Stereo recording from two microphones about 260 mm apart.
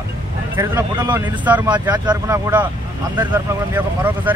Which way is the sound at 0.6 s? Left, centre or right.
Centre.